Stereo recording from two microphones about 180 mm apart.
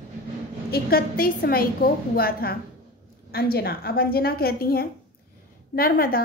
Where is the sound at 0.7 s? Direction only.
55° left (ahead or behind).